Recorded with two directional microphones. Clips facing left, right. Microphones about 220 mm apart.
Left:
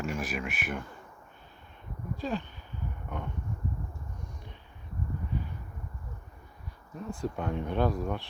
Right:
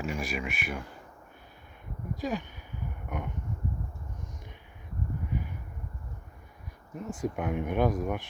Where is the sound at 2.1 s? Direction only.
15° right (ahead or behind).